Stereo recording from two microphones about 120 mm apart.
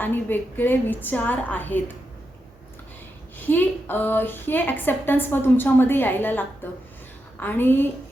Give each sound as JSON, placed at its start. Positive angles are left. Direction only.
{"t": 0.0, "sound": "a woman's voice", "side_deg": 15}
{"t": 3.3, "sound": "a woman's voice", "side_deg": 15}